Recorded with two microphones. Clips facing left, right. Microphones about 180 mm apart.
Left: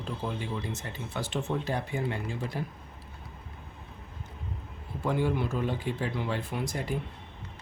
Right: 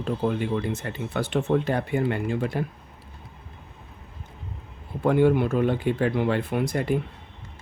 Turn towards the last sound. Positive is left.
turn(degrees=-60)  # may be behind; listen again after turning